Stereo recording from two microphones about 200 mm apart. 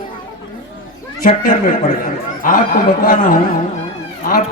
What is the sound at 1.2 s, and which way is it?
A man's voice, 40° left (ahead or behind).